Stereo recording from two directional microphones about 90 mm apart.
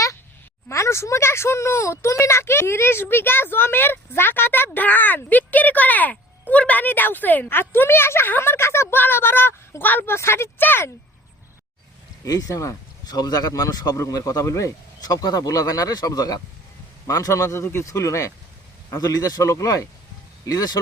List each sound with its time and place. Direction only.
0.7 s speech: 30° left (ahead or behind)
12.2 s speech: 40° left (ahead or behind)